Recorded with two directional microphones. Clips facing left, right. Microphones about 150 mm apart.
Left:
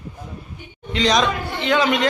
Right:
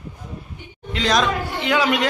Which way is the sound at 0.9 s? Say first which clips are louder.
Left 1 dB; centre (ahead or behind).